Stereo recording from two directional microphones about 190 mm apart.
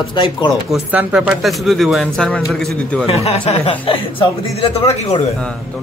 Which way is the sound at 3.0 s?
30° left (ahead or behind).